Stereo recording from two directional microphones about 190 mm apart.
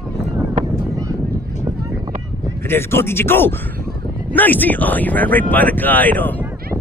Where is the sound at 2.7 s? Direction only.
10° left (ahead or behind).